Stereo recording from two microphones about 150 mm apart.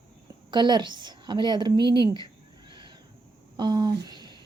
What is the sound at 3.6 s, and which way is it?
Speech, 30° right (ahead or behind).